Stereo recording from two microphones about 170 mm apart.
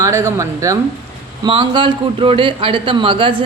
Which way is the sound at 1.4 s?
30° right (ahead or behind).